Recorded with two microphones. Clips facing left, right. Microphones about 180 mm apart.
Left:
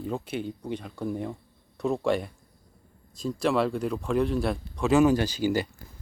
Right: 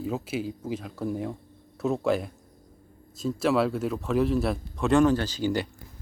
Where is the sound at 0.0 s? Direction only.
5° right (ahead or behind).